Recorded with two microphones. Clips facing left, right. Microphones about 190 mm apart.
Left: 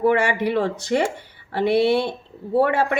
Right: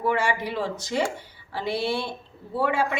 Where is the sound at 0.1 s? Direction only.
65° left (ahead or behind).